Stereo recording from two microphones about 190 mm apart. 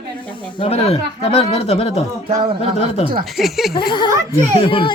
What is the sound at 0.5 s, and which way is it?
Speech, 30° left (ahead or behind).